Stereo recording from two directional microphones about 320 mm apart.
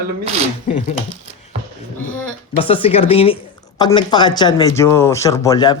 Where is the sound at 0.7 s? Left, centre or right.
Left.